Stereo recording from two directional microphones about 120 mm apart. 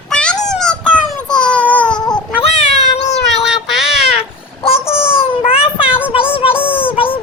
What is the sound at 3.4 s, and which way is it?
Child singing, 5° right (ahead or behind).